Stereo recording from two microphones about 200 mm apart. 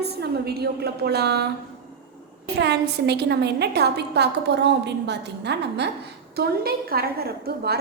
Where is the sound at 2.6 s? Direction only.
55° right (ahead or behind).